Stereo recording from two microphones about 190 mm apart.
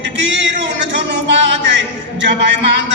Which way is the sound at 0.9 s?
65° right (ahead or behind).